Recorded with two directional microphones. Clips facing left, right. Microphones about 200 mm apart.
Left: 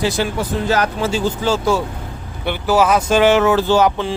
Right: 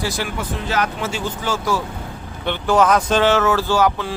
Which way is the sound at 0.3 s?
35° left (ahead or behind).